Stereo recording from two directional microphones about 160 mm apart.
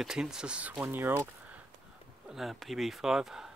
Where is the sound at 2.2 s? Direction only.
Centre (ahead or behind).